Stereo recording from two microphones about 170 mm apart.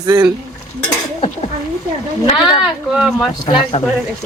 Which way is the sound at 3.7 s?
35° left (ahead or behind).